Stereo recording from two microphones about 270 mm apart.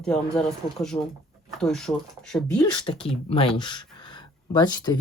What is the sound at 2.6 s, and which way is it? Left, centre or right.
Speech, centre.